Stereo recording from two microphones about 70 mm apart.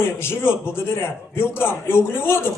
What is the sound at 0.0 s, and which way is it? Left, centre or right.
A man's voice, left.